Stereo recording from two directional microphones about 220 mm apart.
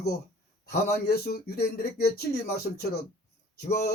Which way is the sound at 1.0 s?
45° left (ahead or behind).